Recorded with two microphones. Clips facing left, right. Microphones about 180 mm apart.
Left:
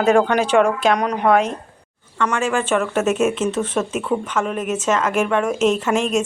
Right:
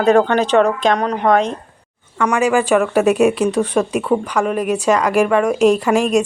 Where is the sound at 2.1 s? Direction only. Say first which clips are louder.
Right 5 dB; 10° right (ahead or behind).